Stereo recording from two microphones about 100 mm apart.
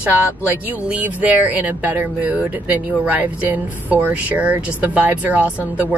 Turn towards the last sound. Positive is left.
turn(degrees=-15)  # may be behind; listen again after turning